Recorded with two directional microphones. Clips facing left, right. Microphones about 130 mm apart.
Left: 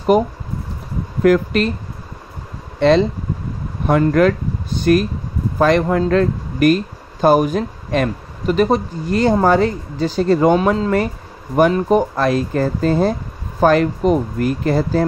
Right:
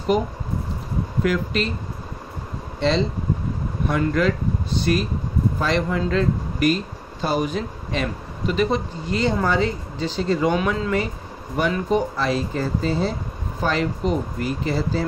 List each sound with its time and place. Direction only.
0.1 s speech: 50° left (ahead or behind)
2.8 s speech: 55° left (ahead or behind)